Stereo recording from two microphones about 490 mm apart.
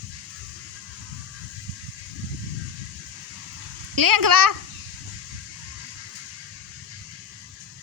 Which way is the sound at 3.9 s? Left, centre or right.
Right.